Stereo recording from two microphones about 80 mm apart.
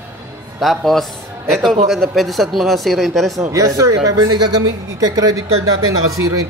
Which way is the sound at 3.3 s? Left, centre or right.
Right.